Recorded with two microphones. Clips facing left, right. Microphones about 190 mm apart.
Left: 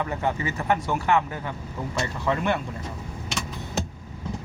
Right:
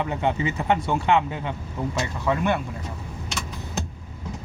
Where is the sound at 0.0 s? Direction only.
20° right (ahead or behind).